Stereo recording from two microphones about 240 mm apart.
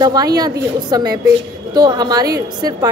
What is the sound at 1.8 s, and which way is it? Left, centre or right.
Speech, centre.